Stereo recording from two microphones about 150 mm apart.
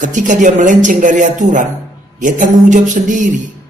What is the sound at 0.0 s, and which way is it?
Speech, 55° right (ahead or behind).